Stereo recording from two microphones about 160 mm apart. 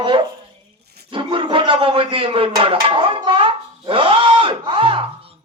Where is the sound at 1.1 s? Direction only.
35° right (ahead or behind).